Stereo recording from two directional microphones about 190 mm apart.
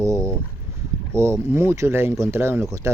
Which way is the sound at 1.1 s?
15° right (ahead or behind).